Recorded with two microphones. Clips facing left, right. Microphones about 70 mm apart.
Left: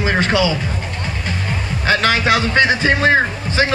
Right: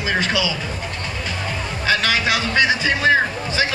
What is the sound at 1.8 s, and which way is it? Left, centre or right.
A man's voice, left.